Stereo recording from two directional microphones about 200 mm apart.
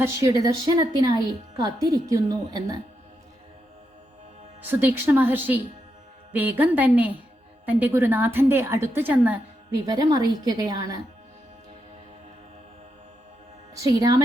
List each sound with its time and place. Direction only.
0.0 s a woman's voice: 15° right (ahead or behind)
4.6 s a woman's voice: 10° right (ahead or behind)
9.8 s a woman's voice: 20° right (ahead or behind)
13.7 s a woman's voice: 20° right (ahead or behind)